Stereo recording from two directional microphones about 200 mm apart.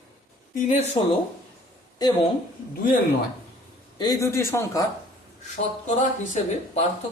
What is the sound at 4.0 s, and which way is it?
Speech, 15° left (ahead or behind).